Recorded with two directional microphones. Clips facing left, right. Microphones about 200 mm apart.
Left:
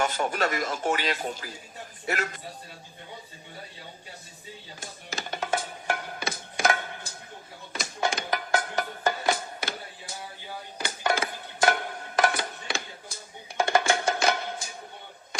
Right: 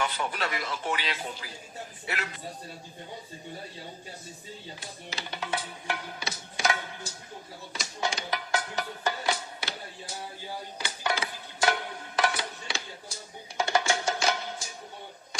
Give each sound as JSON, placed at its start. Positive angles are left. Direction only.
{"t": 0.0, "sound": "a man's voice", "side_deg": 45}
{"t": 4.8, "sound": "speech", "side_deg": 45}
{"t": 7.7, "sound": "music", "side_deg": 55}
{"t": 10.8, "sound": "music", "side_deg": 50}